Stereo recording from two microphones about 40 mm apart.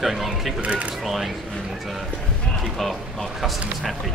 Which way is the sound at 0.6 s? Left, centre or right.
Right.